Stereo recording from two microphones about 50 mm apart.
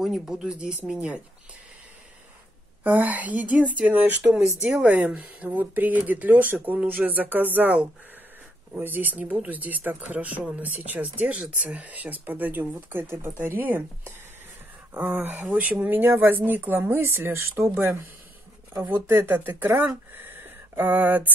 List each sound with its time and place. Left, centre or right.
0.0 s speech: centre
2.8 s speech: right
13.0 s speech: right
13.6 s speech: right
15.0 s speech: right
15.9 s speech: right
20.1 s a sound: right